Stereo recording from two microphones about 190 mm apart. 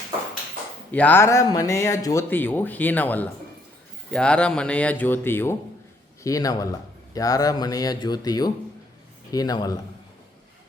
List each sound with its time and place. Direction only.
0.9 s a man's voice: 10° left (ahead or behind)